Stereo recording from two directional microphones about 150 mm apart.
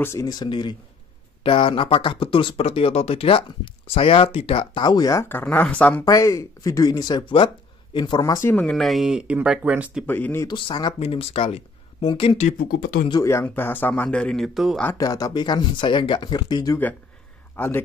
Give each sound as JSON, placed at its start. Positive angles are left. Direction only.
{"t": 0.0, "sound": "speech", "side_deg": 20}
{"t": 5.3, "sound": "a man's voice", "side_deg": 10}
{"t": 6.0, "sound": "speech", "side_deg": 20}
{"t": 10.0, "sound": "a man's voice", "side_deg": 15}
{"t": 10.4, "sound": "speech", "side_deg": 30}
{"t": 12.5, "sound": "speech", "side_deg": 80}
{"t": 13.2, "sound": "a man's voice", "side_deg": 20}
{"t": 15.0, "sound": "speech", "side_deg": 25}
{"t": 17.6, "sound": "a man's voice", "side_deg": 15}